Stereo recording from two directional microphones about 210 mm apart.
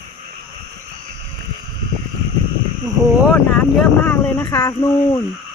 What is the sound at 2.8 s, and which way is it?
Speech, centre (ahead or behind).